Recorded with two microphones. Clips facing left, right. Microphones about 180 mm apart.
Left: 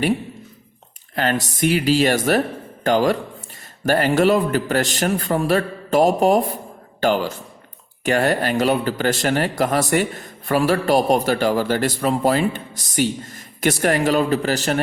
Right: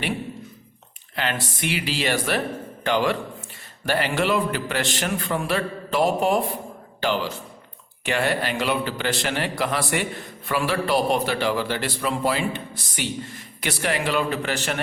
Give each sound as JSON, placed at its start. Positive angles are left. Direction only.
{"t": 1.1, "sound": "a man's voice", "side_deg": 45}